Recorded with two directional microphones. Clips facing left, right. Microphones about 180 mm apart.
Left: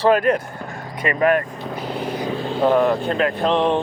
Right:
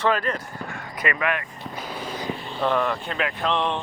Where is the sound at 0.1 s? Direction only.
55° left (ahead or behind).